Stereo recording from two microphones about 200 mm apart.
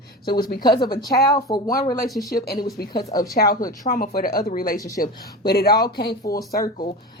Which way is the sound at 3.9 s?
45° left (ahead or behind).